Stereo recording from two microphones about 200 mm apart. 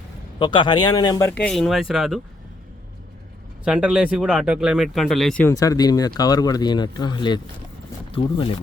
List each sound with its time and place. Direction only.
0.3 s speech: 25° left (ahead or behind)
1.3 s speech: 5° left (ahead or behind)
3.6 s speech: 5° right (ahead or behind); by 8.5 s 25° left (ahead or behind)